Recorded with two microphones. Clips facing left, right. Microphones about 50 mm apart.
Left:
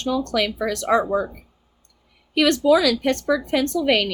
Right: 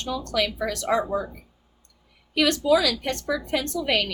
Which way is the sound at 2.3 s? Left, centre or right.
Left.